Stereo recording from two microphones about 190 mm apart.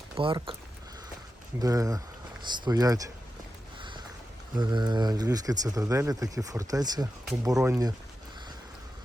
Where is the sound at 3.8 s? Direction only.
25° right (ahead or behind).